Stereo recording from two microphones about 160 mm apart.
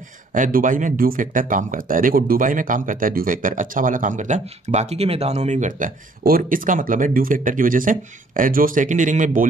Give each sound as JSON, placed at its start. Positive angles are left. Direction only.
{"t": 0.3, "sound": "speech", "side_deg": -60}